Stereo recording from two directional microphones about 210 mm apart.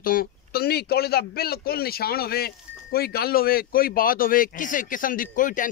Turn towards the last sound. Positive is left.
turn(degrees=40)  # may be behind; listen again after turning